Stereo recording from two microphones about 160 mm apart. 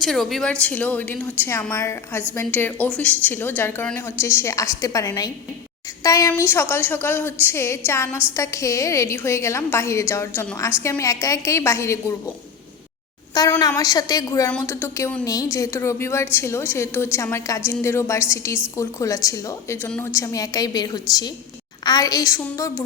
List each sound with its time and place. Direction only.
0.0 s a woman's voice: centre (ahead or behind); by 12.1 s 20° left (ahead or behind)
13.6 s a woman's voice: 20° left (ahead or behind)